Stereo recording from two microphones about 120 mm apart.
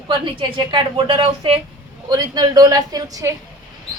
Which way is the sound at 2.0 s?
35° right (ahead or behind).